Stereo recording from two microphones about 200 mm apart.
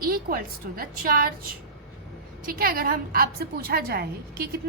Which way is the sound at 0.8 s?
45° right (ahead or behind).